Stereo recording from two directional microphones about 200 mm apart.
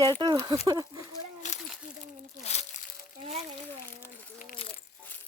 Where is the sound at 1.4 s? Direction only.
35° left (ahead or behind).